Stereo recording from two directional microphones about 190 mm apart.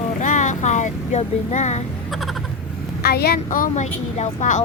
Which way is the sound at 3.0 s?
55° left (ahead or behind).